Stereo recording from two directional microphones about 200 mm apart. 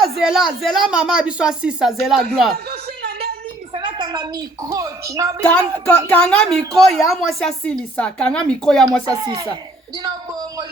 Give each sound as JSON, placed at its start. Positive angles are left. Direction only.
{"t": 0.2, "sound": "speech", "side_deg": 0}
{"t": 2.6, "sound": "a sound", "side_deg": -50}
{"t": 3.7, "sound": "a woman's voice", "side_deg": -20}
{"t": 5.4, "sound": "speech", "side_deg": 5}
{"t": 9.0, "sound": "speech", "side_deg": -20}